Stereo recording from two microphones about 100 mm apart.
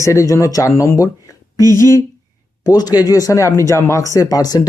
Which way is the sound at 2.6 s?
40° left (ahead or behind).